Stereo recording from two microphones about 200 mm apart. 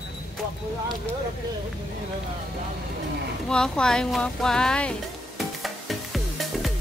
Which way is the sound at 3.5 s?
5° left (ahead or behind).